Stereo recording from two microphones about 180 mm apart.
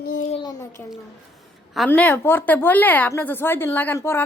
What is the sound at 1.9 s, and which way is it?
A woman's voice, 10° left (ahead or behind).